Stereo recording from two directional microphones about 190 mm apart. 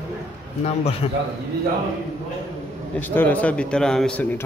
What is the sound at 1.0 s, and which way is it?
Speech, 35° left (ahead or behind).